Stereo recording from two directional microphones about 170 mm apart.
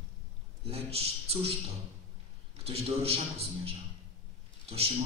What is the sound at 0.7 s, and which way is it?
Speech, 35° right (ahead or behind).